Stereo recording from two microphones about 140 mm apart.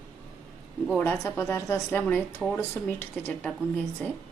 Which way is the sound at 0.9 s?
15° left (ahead or behind).